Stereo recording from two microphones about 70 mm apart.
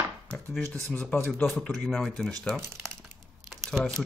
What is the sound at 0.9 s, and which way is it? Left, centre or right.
Speech, centre.